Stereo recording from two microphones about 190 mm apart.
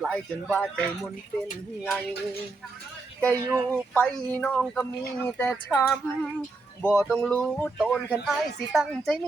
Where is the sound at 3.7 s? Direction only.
5° left (ahead or behind).